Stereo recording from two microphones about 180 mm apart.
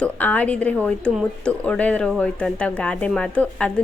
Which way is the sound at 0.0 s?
10° left (ahead or behind).